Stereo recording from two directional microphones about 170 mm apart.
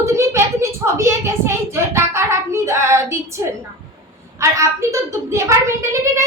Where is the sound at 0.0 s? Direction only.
15° right (ahead or behind).